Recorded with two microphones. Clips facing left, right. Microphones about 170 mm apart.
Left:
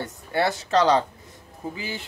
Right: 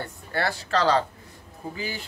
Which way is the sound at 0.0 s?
20° left (ahead or behind).